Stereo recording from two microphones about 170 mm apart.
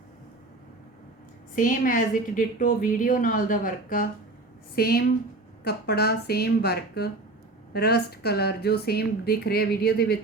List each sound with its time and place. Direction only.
1.5 s a woman's voice: 55° left (ahead or behind)
4.7 s a woman's voice: 65° left (ahead or behind)